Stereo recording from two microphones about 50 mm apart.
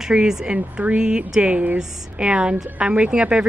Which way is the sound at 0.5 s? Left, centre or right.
Right.